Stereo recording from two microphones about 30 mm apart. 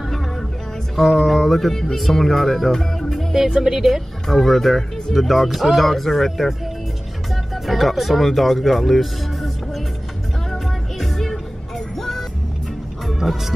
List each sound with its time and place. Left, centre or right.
0.9 s speech: centre
3.7 s speech: centre
4.3 s speech: centre
7.5 s speech: centre
10.5 s music: centre